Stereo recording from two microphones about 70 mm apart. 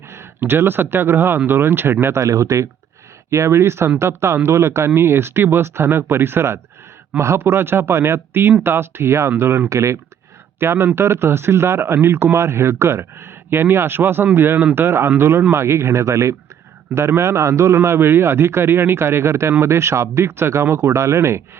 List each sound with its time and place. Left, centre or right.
0.1 s a man's voice: right
2.2 s a man's voice: right